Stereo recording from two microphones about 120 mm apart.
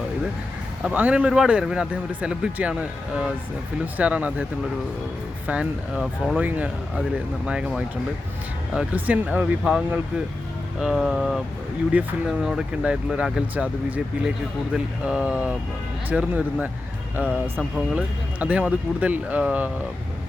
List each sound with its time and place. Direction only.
0.8 s speech: 10° right (ahead or behind)
5.5 s speech: 10° right (ahead or behind)
11.9 s speech: 15° right (ahead or behind)